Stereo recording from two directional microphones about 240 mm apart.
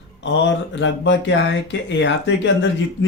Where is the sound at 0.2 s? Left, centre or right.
Left.